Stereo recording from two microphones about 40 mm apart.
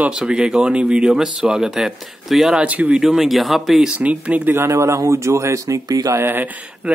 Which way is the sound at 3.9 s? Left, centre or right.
Right.